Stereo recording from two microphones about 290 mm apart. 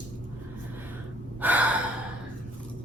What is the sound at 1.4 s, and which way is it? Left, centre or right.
Gasp, centre.